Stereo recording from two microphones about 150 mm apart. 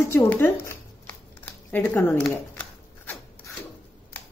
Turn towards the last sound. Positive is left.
turn(degrees=15)  # may be behind; listen again after turning